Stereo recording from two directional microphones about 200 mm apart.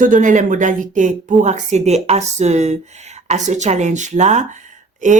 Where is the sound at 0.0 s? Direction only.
40° right (ahead or behind).